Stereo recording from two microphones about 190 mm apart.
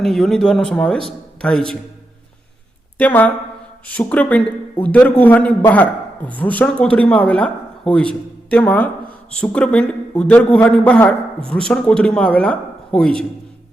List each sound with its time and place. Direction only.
0.0 s a man's voice: centre (ahead or behind)
3.0 s a man's voice: 10° left (ahead or behind)